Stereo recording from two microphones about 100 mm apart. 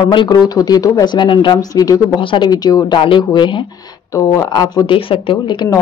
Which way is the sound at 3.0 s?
55° left (ahead or behind).